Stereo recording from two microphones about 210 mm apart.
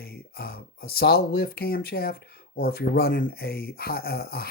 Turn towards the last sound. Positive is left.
turn(degrees=45)  # may be behind; listen again after turning